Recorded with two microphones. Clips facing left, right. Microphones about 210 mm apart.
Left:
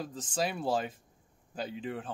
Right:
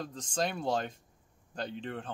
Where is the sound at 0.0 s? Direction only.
5° left (ahead or behind).